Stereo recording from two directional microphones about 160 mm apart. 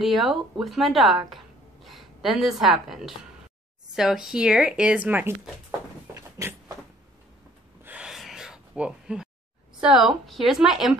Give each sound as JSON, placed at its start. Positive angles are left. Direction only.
{"t": 0.0, "sound": "a woman's voice", "side_deg": 0}
{"t": 6.1, "sound": "a sound", "side_deg": -20}
{"t": 7.8, "sound": "gasp", "side_deg": -5}
{"t": 9.8, "sound": "speech", "side_deg": 0}